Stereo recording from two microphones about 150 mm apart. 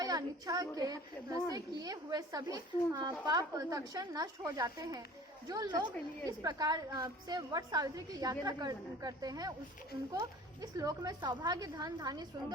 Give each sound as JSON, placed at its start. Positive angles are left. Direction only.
{"t": 0.0, "sound": "a child's voice", "side_deg": -25}